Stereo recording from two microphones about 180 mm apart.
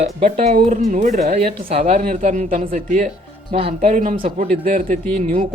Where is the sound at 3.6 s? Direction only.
35° right (ahead or behind).